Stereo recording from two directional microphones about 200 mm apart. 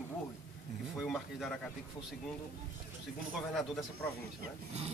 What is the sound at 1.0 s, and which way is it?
Speech, centre (ahead or behind).